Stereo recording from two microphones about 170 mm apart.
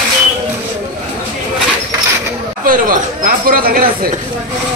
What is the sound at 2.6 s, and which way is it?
Speech, 55° right (ahead or behind).